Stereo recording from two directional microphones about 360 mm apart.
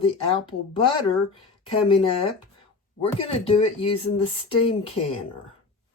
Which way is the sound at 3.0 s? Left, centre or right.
Centre.